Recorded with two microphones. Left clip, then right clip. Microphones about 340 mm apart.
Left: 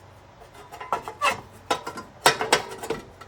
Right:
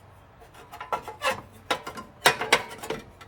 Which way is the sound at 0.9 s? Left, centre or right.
Centre.